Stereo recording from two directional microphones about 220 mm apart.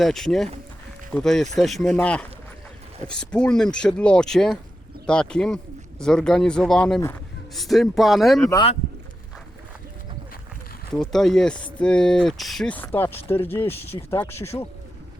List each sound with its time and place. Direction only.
0.0 s speech: centre (ahead or behind)
8.4 s speech: 15° left (ahead or behind)
10.9 s speech: centre (ahead or behind)